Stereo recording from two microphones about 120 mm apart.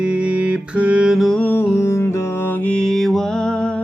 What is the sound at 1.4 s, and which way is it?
Music, 15° left (ahead or behind).